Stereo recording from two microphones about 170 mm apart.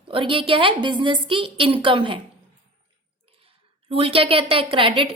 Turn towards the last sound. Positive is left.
turn(degrees=-30)  # may be behind; listen again after turning